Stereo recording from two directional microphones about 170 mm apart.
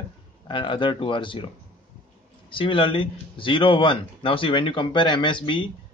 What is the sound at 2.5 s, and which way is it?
A man's voice, 30° left (ahead or behind).